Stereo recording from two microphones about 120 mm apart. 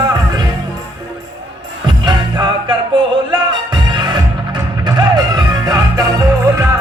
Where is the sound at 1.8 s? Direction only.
40° right (ahead or behind).